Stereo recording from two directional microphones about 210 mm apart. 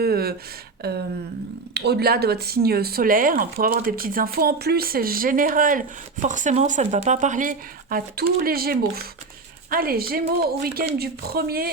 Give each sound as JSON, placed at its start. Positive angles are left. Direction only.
{"t": 0.0, "sound": "speech", "side_deg": -50}
{"t": 0.8, "sound": "a sound", "side_deg": -50}
{"t": 1.7, "sound": "speech", "side_deg": -50}